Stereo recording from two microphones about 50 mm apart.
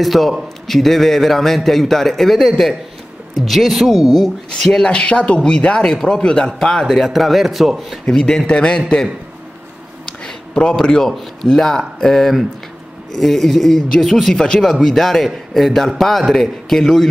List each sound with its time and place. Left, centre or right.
0.0 s a man's voice: centre
4.6 s speech: centre
5.9 s speech: centre
6.8 s a man's voice: centre
8.3 s speech: centre
8.8 s speech: centre
10.2 s a sound: centre
10.8 s a man's voice: centre